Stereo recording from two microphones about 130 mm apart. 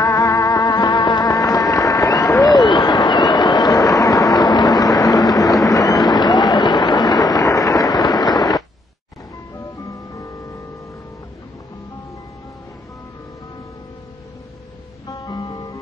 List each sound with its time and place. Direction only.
0.0 s music: 25° left (ahead or behind)
4.9 s vehicle: 25° left (ahead or behind)
5.7 s a sound: 25° left (ahead or behind)
9.8 s music: 25° left (ahead or behind)
15.0 s music: 25° left (ahead or behind)